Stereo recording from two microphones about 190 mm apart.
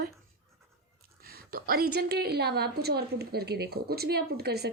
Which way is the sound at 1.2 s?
55° right (ahead or behind).